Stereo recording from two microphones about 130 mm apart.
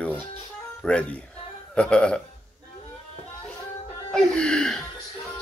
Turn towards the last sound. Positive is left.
turn(degrees=5)  # may be behind; listen again after turning